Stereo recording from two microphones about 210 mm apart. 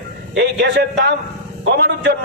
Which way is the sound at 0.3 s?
55° right (ahead or behind).